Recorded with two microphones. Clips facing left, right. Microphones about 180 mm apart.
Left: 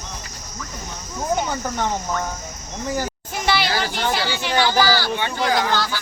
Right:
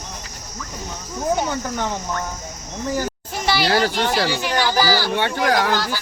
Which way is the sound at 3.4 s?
35° right (ahead or behind).